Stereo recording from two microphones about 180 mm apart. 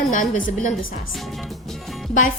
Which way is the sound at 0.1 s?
45° left (ahead or behind).